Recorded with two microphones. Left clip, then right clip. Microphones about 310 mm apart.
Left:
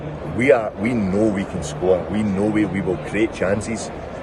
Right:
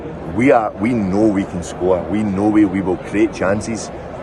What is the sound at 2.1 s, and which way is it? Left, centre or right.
Speech, centre.